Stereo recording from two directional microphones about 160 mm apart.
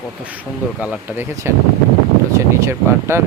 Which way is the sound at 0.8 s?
10° right (ahead or behind).